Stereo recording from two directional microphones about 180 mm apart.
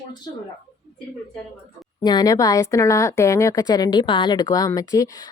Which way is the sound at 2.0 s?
20° left (ahead or behind).